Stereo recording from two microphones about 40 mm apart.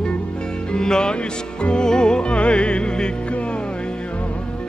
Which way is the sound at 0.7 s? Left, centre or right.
Centre.